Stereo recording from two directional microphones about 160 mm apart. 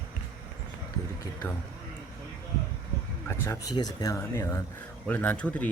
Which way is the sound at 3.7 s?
25° left (ahead or behind).